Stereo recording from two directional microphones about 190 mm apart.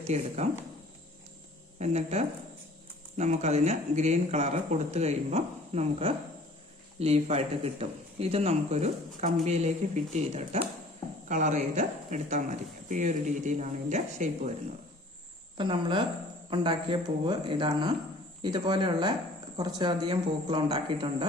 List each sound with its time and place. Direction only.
0.1 s speech: 35° right (ahead or behind)
1.8 s speech: 35° right (ahead or behind)
15.5 s speech: 25° right (ahead or behind)